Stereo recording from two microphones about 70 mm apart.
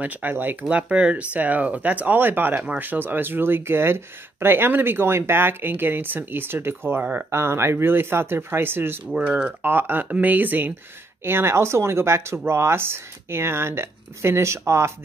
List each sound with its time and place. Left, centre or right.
0.0 s speech: right
0.7 s speech: centre; by 7.0 s right
7.0 s speech: right
7.2 s speech: right
9.1 s speech: centre
9.6 s speech: right
11.2 s speech: right